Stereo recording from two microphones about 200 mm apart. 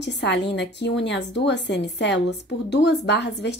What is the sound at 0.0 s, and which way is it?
A woman's voice, 60° left (ahead or behind).